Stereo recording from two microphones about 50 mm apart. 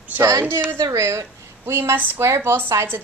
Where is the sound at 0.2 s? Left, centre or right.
Right.